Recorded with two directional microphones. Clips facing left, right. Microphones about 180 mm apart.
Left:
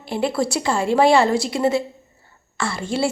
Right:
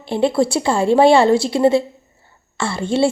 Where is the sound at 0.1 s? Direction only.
25° right (ahead or behind).